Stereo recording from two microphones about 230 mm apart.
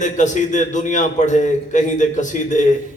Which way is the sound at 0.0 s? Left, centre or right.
Left.